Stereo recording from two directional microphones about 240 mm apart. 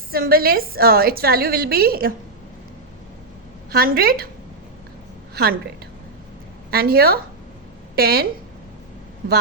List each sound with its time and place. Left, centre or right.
0.1 s a woman's voice: right
3.7 s a woman's voice: right
5.3 s a woman's voice: right
6.7 s a woman's voice: right